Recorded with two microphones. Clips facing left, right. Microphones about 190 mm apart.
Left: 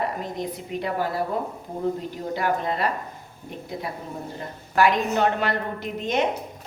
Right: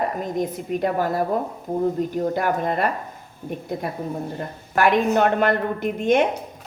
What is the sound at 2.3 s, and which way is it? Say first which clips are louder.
A woman's voice: right 3 dB; 50° right (ahead or behind).